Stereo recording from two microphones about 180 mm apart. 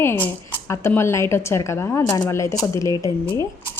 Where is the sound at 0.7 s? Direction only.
15° left (ahead or behind).